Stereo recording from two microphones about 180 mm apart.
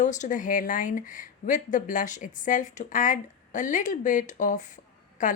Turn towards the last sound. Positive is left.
turn(degrees=45)  # may be behind; listen again after turning